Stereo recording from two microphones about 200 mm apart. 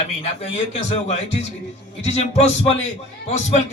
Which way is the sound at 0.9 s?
35° left (ahead or behind).